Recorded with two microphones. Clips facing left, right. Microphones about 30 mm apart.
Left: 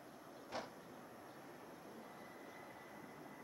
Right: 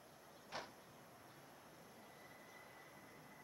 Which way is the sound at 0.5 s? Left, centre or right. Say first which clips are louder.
Left 3 dB; right.